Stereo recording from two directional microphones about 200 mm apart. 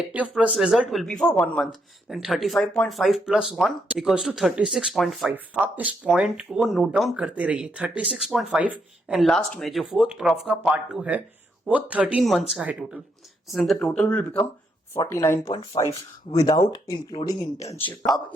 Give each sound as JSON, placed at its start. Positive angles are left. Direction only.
{"t": 0.1, "sound": "speech", "side_deg": -5}
{"t": 10.7, "sound": "speech", "side_deg": -5}